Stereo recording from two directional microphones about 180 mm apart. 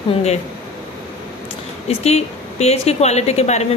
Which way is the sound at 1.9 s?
35° left (ahead or behind).